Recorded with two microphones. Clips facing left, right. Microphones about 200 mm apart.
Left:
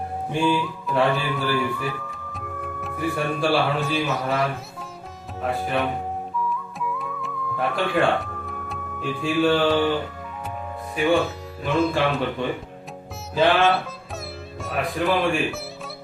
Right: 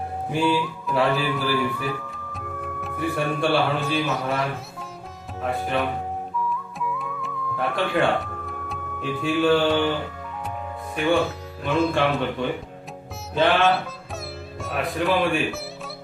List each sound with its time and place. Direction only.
0.3 s music: 5° right (ahead or behind)
5.4 s speech: centre (ahead or behind)
6.7 s music: centre (ahead or behind)
10.9 s speech: centre (ahead or behind)
13.3 s speech: centre (ahead or behind)